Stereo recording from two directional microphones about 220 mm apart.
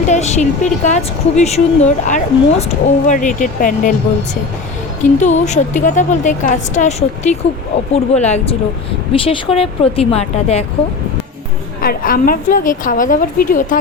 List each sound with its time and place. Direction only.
0.0 s a woman's voice: 30° left (ahead or behind)
5.2 s a woman's voice: 30° left (ahead or behind)
11.8 s a woman's voice: 40° left (ahead or behind)